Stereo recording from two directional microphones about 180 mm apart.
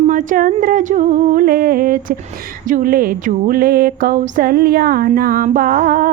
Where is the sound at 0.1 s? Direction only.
45° right (ahead or behind).